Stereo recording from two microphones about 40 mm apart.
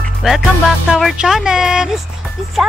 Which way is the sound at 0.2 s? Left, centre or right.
Centre.